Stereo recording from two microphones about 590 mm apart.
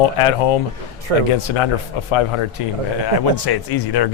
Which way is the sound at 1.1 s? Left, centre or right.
Right.